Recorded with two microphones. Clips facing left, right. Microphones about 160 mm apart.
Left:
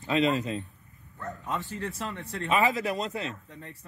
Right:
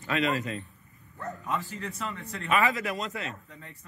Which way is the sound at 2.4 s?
30° left (ahead or behind).